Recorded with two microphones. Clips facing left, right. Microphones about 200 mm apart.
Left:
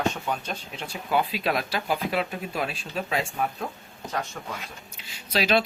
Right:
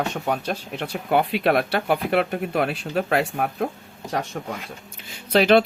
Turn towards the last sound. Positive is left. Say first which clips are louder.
# right 7 dB
turn(degrees=-60)  # may be behind; listen again after turning